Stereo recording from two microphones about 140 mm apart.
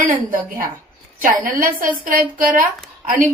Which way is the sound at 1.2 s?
80° right.